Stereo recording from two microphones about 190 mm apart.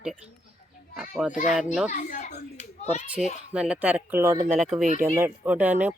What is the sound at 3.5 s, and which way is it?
Speech, 5° right (ahead or behind).